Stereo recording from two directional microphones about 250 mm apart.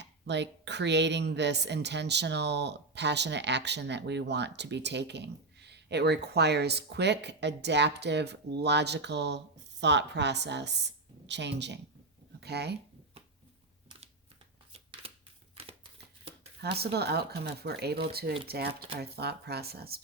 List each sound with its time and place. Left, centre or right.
0.0 s a woman's voice: right
15.0 s a sound: right
16.6 s speech: right